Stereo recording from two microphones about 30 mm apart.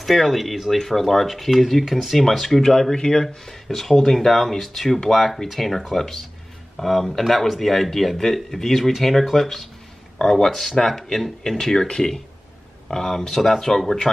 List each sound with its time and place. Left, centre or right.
0.0 s speech: centre
2.6 s speech: centre
3.6 s speech: centre
10.3 s speech: centre